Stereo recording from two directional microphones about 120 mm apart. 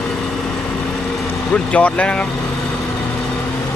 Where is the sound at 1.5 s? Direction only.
10° left (ahead or behind).